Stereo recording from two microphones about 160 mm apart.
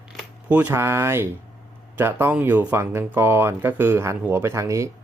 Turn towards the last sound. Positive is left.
turn(degrees=-20)  # may be behind; listen again after turning